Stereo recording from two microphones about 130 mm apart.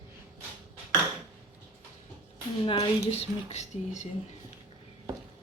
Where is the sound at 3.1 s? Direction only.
60° left (ahead or behind).